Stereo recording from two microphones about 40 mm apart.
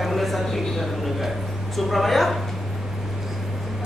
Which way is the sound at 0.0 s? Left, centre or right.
Centre.